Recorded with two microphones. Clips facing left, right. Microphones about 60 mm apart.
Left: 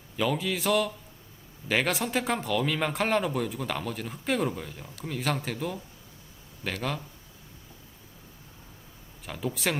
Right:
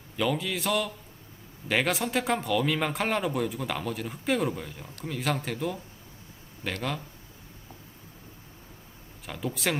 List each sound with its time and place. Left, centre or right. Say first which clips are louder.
0.2 s speech: even; centre
9.2 s speech: even; centre